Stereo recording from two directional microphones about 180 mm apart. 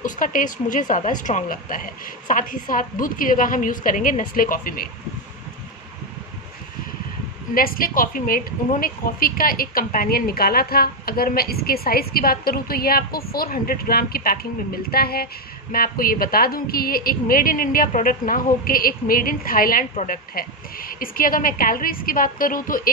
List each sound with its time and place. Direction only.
0.0 s a woman's voice: 50° left (ahead or behind)
7.5 s a woman's voice: 55° left (ahead or behind)